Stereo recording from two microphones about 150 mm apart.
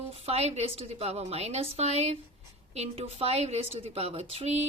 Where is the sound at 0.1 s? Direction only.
45° right (ahead or behind).